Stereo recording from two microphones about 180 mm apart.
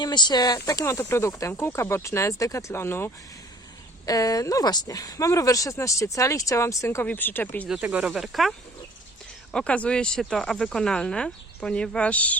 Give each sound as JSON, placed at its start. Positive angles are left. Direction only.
{"t": 0.0, "sound": "speech", "side_deg": 25}
{"t": 7.7, "sound": "speech", "side_deg": -5}